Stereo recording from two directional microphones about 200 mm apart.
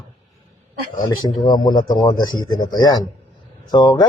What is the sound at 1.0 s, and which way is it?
A man's voice, 20° left (ahead or behind).